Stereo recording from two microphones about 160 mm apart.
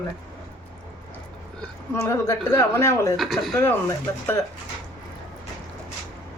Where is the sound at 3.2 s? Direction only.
Centre (ahead or behind).